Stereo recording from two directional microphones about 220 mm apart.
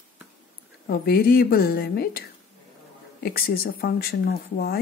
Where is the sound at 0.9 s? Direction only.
45° left (ahead or behind).